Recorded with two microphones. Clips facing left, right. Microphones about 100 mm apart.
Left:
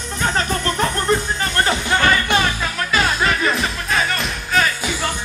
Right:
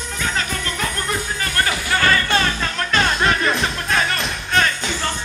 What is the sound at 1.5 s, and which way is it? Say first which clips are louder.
Music: left 2 dB; 25° left (ahead or behind).